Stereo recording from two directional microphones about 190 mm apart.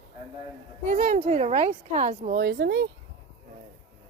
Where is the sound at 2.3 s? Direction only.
60° right (ahead or behind).